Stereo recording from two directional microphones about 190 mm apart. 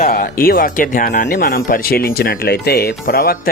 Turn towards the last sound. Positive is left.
turn(degrees=50)  # may be behind; listen again after turning